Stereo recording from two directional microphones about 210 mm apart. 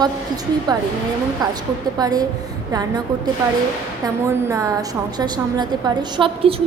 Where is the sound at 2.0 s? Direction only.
20° right (ahead or behind).